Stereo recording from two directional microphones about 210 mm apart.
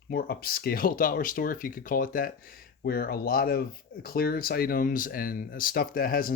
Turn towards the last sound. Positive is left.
turn(degrees=45)  # may be behind; listen again after turning